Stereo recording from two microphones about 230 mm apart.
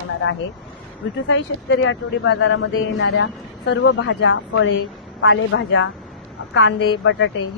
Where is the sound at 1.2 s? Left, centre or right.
Left.